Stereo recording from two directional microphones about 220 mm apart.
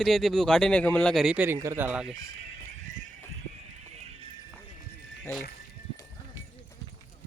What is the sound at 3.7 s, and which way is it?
Music, 30° right (ahead or behind).